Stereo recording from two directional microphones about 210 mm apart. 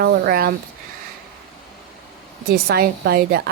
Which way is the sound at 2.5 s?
45° right (ahead or behind).